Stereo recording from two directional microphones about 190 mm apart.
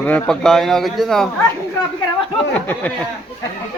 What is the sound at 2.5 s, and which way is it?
Speech, 5° left (ahead or behind).